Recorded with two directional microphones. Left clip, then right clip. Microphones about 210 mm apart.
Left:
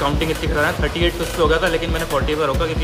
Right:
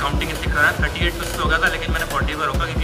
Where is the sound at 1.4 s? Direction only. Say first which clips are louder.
Left 2 dB; 25° left (ahead or behind).